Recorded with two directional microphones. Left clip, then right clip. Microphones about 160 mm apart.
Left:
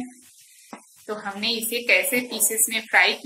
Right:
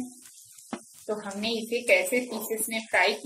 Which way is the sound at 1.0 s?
20° right (ahead or behind).